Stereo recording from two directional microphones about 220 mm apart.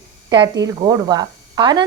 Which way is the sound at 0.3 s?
15° right (ahead or behind).